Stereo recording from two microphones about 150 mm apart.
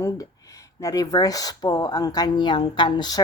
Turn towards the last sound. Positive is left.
turn(degrees=30)  # may be behind; listen again after turning